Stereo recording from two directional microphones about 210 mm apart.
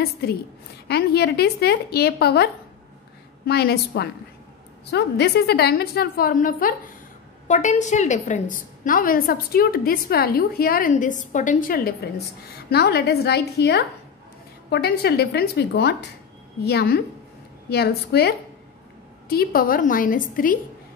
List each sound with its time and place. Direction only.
0.0 s a woman's voice: 50° left (ahead or behind)